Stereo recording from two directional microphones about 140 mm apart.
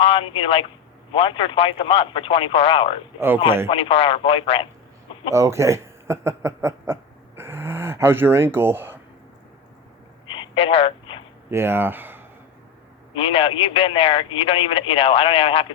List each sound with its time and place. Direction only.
0.0 s a man's voice: 40° left (ahead or behind)
3.2 s speech: 15° right (ahead or behind)
3.7 s a man's voice: 40° left (ahead or behind)
5.3 s a sound: 20° right (ahead or behind)
10.2 s a sound: 35° left (ahead or behind)
11.5 s speech: 15° right (ahead or behind)
13.1 s a man's voice: 40° left (ahead or behind)